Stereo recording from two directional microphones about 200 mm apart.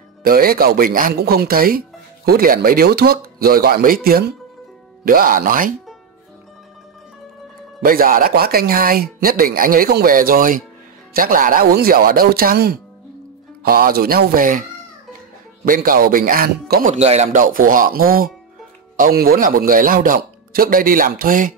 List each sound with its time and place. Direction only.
0.2 s speech: 50° right (ahead or behind)
7.8 s speech: 45° right (ahead or behind)
15.6 s speech: 45° right (ahead or behind)